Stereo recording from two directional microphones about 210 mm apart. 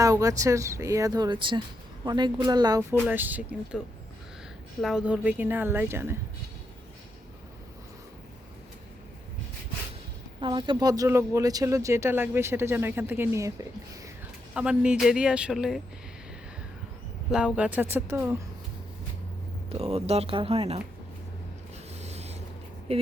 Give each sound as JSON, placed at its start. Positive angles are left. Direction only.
{"t": 0.0, "sound": "speech", "side_deg": -15}
{"t": 10.4, "sound": "speech", "side_deg": -20}
{"t": 17.3, "sound": "speech", "side_deg": -5}
{"t": 19.7, "sound": "speech", "side_deg": -30}
{"t": 21.9, "sound": "a sound", "side_deg": -30}
{"t": 22.9, "sound": "speech", "side_deg": -30}